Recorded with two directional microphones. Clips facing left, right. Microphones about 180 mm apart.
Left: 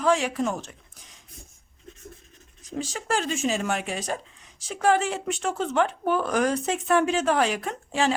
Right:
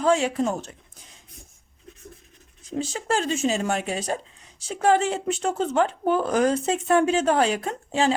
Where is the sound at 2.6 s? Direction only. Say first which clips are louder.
Right 3 dB; 30° right (ahead or behind).